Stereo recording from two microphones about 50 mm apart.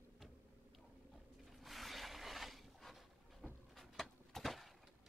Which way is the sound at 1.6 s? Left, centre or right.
Centre.